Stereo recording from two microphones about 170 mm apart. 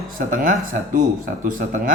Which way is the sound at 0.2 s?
50° right (ahead or behind).